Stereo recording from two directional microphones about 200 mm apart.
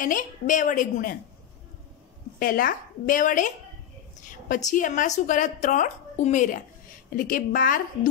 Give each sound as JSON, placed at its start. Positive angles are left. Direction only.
{"t": 0.0, "sound": "a woman's voice", "side_deg": 40}
{"t": 2.3, "sound": "a woman's voice", "side_deg": 45}